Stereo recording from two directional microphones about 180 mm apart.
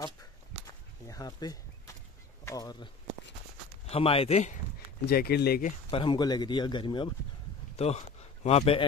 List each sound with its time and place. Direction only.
1.0 s speech: 20° left (ahead or behind)
3.9 s speech: 30° left (ahead or behind)
5.0 s speech: 60° left (ahead or behind)
5.7 s speech: 30° left (ahead or behind)